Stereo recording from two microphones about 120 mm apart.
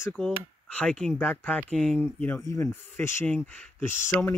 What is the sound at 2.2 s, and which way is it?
Speech, 20° left (ahead or behind).